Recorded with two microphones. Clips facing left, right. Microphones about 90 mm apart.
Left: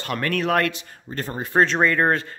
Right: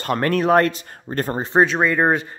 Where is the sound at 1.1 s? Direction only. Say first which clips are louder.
Right 7 dB; 50° right (ahead or behind).